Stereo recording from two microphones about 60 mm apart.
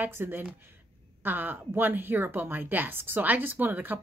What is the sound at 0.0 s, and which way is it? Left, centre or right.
A woman's voice, right.